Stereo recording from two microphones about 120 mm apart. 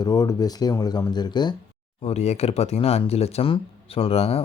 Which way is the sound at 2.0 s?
65° left (ahead or behind).